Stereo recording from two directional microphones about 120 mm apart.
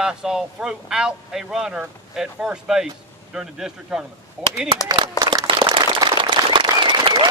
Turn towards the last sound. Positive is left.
turn(degrees=-40)  # may be behind; listen again after turning